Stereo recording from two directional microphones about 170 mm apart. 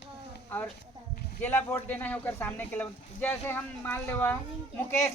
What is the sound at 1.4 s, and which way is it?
A man's voice, 10° left (ahead or behind).